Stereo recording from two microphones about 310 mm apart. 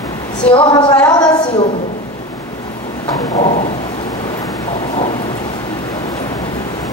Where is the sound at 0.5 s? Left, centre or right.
Centre.